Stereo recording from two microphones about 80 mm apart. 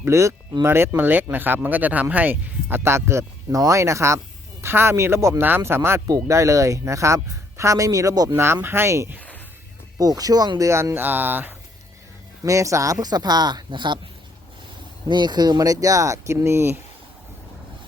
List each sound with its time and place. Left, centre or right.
0.0 s speech: right
8.6 s speech: right
10.0 s speech: right
10.6 s speech: right
12.5 s speech: right
15.0 s speech: right